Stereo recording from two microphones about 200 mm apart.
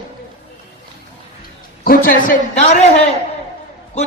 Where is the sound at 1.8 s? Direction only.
45° left (ahead or behind).